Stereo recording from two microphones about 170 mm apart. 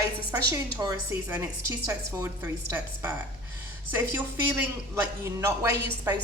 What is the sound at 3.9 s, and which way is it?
A woman's voice, 10° right (ahead or behind).